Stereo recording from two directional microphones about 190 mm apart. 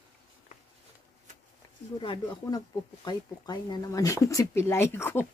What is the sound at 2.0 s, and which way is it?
Speech, 25° left (ahead or behind).